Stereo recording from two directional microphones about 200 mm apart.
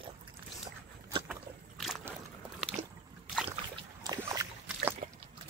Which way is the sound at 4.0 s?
15° right (ahead or behind).